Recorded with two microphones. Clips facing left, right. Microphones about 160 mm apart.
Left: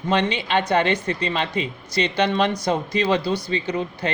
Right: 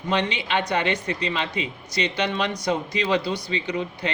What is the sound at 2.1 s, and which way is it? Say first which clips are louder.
A man's voice: left 7 dB; 35° left (ahead or behind).